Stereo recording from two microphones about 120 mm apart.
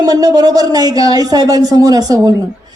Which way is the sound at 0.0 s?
30° right (ahead or behind).